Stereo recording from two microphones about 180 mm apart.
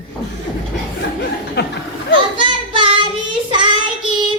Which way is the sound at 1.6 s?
65° left (ahead or behind).